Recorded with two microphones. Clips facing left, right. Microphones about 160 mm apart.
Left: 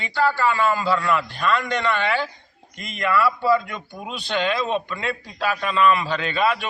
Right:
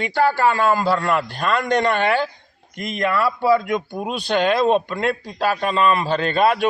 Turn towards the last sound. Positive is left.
turn(degrees=-45)  # may be behind; listen again after turning